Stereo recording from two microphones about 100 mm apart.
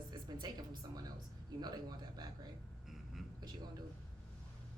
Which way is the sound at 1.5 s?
45° right (ahead or behind).